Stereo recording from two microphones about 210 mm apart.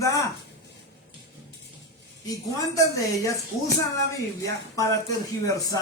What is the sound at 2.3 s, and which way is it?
A man's voice, 15° left (ahead or behind).